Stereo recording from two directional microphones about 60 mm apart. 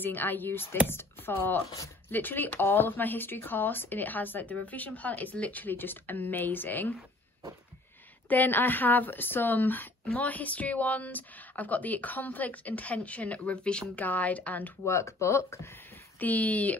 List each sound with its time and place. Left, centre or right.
0.0 s a woman's voice: left
8.3 s a woman's voice: left
14.9 s speech: left
16.2 s speech: left